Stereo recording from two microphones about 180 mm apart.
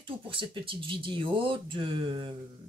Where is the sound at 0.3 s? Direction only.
30° right (ahead or behind).